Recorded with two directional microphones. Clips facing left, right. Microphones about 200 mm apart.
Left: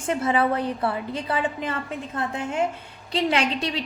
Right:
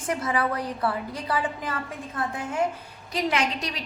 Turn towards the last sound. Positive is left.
turn(degrees=30)  # may be behind; listen again after turning